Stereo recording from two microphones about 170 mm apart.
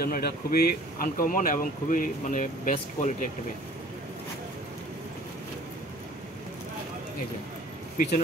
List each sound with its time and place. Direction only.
0.0 s speech: 60° left (ahead or behind)